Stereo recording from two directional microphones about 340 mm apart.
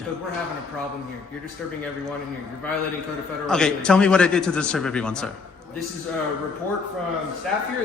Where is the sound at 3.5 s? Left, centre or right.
Centre.